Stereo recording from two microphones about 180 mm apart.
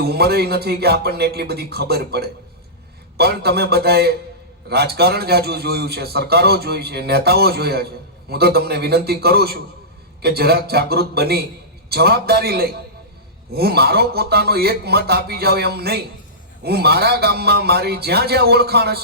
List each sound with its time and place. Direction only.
0.0 s a man's voice: 60° right (ahead or behind)